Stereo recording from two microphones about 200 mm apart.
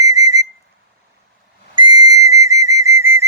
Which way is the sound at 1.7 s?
20° right (ahead or behind).